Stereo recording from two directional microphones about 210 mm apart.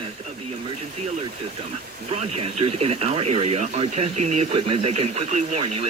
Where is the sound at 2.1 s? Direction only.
30° right (ahead or behind).